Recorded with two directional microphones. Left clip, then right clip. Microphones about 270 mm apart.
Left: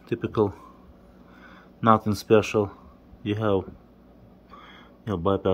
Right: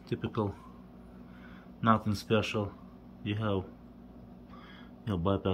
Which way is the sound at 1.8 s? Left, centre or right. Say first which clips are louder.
Left 8 dB; centre.